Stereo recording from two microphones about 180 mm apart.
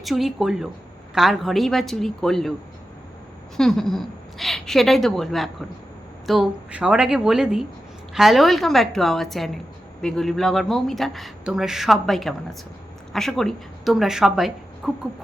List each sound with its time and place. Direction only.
0.0 s speech: centre (ahead or behind)
3.6 s a woman's voice: centre (ahead or behind)